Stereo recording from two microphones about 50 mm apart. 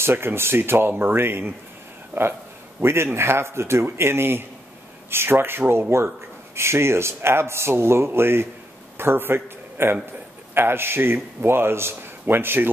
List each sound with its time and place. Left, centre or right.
0.0 s speech: right
2.8 s a man's voice: right